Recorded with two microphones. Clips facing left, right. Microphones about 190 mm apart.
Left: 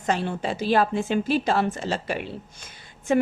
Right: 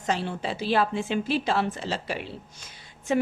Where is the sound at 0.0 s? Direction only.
50° left (ahead or behind).